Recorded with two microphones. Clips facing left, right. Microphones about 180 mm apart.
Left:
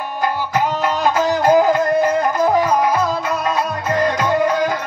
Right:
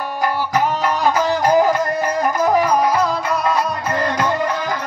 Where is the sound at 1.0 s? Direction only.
20° left (ahead or behind).